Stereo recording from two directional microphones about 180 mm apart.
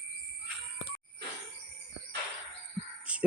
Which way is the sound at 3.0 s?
5° right (ahead or behind).